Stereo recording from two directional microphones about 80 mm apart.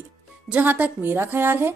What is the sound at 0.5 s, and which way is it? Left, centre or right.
A woman's voice, centre.